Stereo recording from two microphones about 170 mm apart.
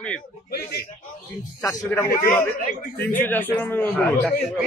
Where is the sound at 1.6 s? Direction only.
20° left (ahead or behind).